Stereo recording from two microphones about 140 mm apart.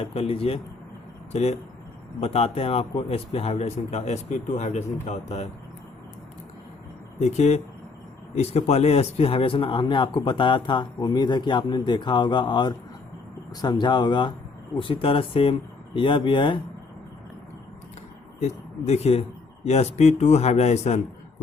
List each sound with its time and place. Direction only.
0.0 s speech: 45° left (ahead or behind)
7.2 s speech: 50° left (ahead or behind); by 16.6 s 35° left (ahead or behind)
18.3 s speech: 50° left (ahead or behind)